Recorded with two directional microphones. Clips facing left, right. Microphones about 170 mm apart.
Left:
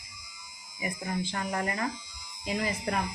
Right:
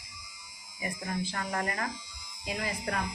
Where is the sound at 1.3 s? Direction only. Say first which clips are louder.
Left 2 dB; 15° left (ahead or behind).